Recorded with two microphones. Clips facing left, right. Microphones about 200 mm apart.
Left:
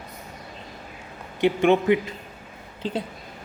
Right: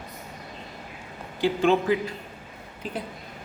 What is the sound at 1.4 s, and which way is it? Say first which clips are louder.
Speech: left 3 dB; 20° left (ahead or behind).